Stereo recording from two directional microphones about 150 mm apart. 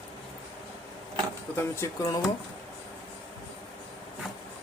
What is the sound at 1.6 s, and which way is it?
Speech, 20° left (ahead or behind).